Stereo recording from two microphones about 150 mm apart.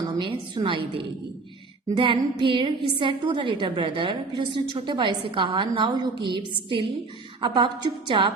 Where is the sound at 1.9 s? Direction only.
30° right (ahead or behind).